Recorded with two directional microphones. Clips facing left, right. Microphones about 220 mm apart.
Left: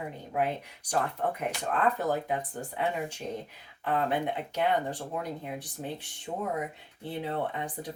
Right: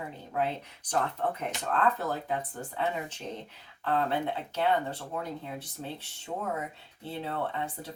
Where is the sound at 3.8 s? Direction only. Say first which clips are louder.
Even; 15° left (ahead or behind).